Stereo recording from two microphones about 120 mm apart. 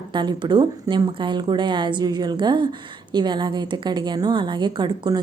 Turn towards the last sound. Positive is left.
turn(degrees=-35)  # may be behind; listen again after turning